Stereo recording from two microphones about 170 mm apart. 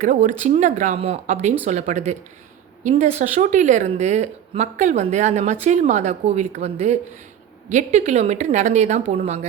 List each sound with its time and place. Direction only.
0.0 s a woman's voice: 45° right (ahead or behind)